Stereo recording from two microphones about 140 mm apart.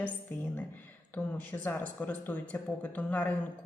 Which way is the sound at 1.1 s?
10° left (ahead or behind).